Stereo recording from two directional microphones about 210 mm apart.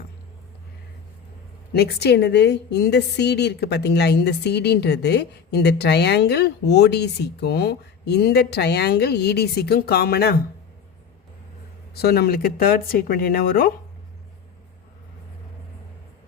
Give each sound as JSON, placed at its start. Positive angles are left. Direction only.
{"t": 1.7, "sound": "a woman's voice", "side_deg": 50}
{"t": 11.9, "sound": "a woman's voice", "side_deg": 50}